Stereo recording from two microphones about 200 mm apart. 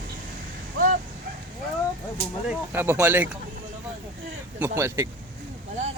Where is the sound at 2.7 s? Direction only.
10° right (ahead or behind).